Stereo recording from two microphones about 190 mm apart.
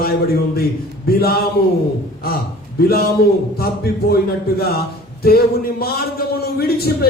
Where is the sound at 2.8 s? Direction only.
55° left (ahead or behind).